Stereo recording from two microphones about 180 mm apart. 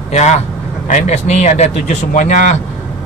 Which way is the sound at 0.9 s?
40° left (ahead or behind).